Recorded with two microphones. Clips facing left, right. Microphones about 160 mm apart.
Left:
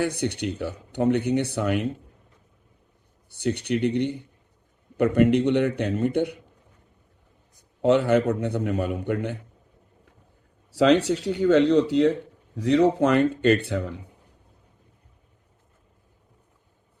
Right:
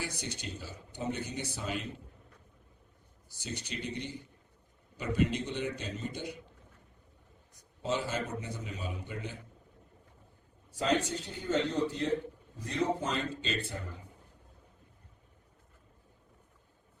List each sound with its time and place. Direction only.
0.0 s speech: 60° left (ahead or behind)
3.2 s speech: 60° left (ahead or behind)
7.8 s speech: 60° left (ahead or behind)
10.7 s speech: 80° left